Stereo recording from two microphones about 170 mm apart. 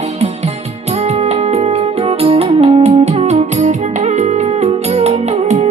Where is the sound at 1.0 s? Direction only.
40° right (ahead or behind).